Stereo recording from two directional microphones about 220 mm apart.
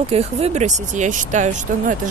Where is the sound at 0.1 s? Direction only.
30° right (ahead or behind).